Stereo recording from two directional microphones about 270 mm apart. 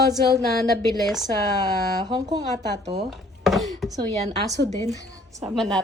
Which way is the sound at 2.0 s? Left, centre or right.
Centre.